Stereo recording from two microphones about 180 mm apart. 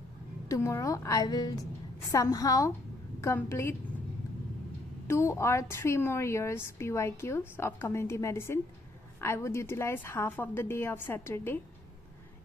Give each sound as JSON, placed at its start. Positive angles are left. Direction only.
{"t": 0.5, "sound": "a woman's voice", "side_deg": 15}
{"t": 5.0, "sound": "a woman's voice", "side_deg": 15}